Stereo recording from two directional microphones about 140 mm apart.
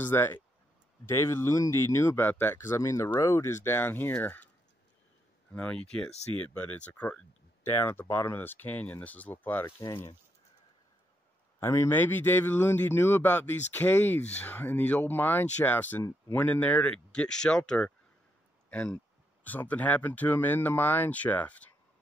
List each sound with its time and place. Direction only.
0.0 s speech: 15° left (ahead or behind)
5.5 s speech: 10° left (ahead or behind)
9.8 s speech: 25° left (ahead or behind)
11.6 s speech: 20° left (ahead or behind)